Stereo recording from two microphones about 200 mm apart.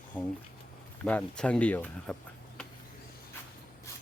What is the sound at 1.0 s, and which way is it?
Speech, 5° left (ahead or behind).